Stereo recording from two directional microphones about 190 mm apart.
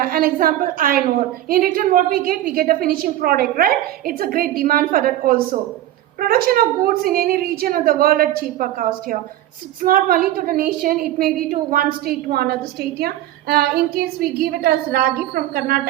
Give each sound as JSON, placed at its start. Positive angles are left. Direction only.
{"t": 0.0, "sound": "a woman's voice", "side_deg": -50}